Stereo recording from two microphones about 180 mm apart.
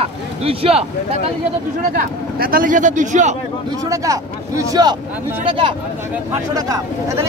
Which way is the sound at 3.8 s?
20° right (ahead or behind).